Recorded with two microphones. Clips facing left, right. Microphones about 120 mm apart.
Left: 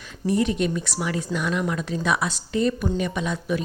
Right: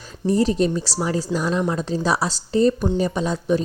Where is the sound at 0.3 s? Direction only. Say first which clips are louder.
Right 4 dB; 35° right (ahead or behind).